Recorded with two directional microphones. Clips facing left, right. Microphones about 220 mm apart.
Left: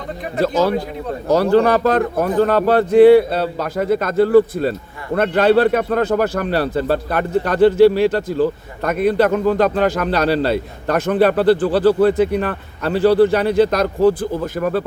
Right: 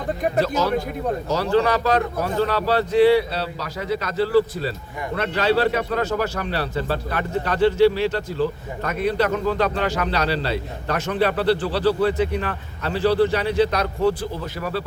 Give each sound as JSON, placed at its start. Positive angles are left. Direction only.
{"t": 0.3, "sound": "a man's voice", "side_deg": 50}